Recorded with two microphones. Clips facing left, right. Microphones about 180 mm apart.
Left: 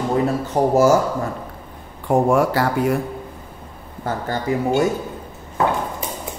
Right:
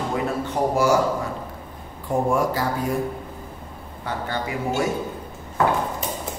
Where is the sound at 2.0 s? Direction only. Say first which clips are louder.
Left 5 dB; 70° left (ahead or behind).